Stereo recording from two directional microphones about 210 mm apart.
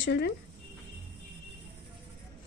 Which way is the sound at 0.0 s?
55° left (ahead or behind).